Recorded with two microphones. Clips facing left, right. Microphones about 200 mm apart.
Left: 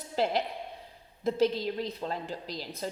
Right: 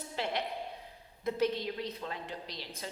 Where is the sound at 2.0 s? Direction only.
35° left (ahead or behind).